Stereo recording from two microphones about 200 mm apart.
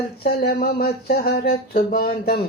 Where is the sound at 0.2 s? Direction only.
50° left (ahead or behind).